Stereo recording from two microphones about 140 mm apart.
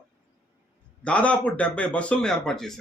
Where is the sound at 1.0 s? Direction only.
10° left (ahead or behind).